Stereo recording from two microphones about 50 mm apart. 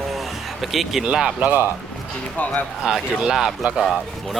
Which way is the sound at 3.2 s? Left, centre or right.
Centre.